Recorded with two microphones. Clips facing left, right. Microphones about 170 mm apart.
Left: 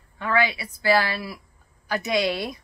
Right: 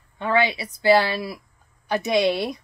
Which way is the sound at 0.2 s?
25° right (ahead or behind).